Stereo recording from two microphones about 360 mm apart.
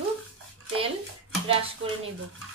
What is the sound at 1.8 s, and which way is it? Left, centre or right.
Speech, right.